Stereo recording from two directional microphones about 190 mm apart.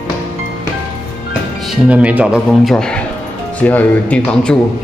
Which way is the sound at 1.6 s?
5° right (ahead or behind).